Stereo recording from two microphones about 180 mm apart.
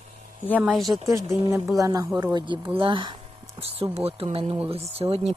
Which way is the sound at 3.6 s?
35° right (ahead or behind).